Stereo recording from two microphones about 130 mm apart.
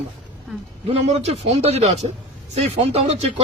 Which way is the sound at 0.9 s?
55° right (ahead or behind).